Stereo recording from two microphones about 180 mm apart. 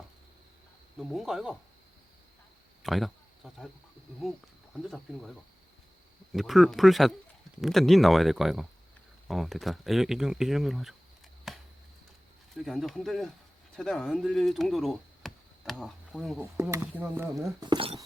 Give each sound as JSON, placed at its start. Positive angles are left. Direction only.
{"t": 0.9, "sound": "speech", "side_deg": 0}
{"t": 2.8, "sound": "speech", "side_deg": 0}
{"t": 4.7, "sound": "speech", "side_deg": 0}
{"t": 6.3, "sound": "speech", "side_deg": 0}
{"t": 11.5, "sound": "a sound", "side_deg": 0}
{"t": 12.5, "sound": "speech", "side_deg": 0}
{"t": 16.7, "sound": "speech", "side_deg": -10}